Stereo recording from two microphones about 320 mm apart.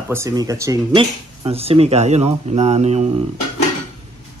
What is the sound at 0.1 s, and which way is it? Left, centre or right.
Speech, centre.